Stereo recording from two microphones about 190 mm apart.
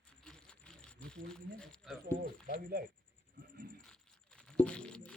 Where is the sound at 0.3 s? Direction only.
5° left (ahead or behind).